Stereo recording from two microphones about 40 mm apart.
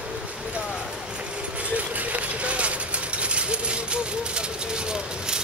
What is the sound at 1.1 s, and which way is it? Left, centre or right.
Vehicle, right.